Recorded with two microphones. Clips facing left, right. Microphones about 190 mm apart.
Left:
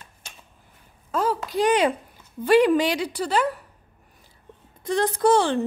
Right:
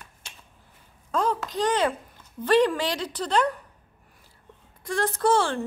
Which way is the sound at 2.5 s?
10° left (ahead or behind).